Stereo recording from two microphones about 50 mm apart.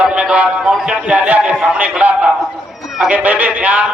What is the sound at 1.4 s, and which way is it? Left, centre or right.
Speech, right.